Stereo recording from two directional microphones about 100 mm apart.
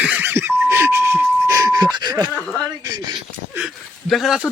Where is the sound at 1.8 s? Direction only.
45° right (ahead or behind).